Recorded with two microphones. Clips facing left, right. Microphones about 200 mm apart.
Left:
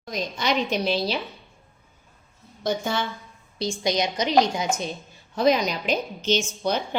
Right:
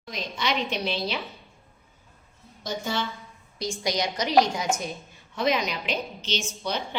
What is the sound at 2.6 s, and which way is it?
Speech, 55° left (ahead or behind).